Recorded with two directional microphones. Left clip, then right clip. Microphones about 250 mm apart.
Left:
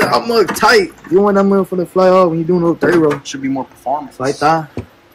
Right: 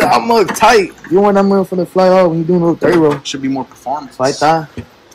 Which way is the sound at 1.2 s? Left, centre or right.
Centre.